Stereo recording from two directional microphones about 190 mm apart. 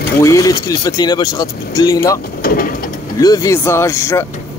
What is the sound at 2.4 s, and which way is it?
Printer, 50° left (ahead or behind).